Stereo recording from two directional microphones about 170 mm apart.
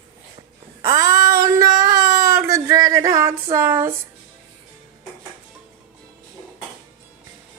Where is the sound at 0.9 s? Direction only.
20° right (ahead or behind).